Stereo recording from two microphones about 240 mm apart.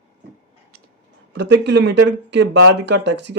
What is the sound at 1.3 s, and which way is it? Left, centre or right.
Speech, right.